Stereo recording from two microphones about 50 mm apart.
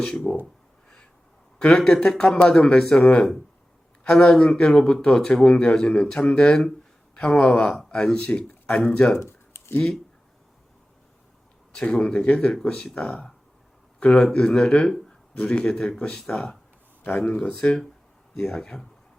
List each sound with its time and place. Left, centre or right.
0.0 s a man's voice: centre
1.5 s a man's voice: centre
9.1 s a sound: left
9.7 s a man's voice: centre
11.7 s a man's voice: left
17.0 s speech: left
17.5 s a man's voice: centre